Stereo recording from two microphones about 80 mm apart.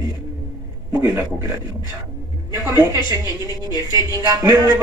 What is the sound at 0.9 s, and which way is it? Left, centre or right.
Speech, right.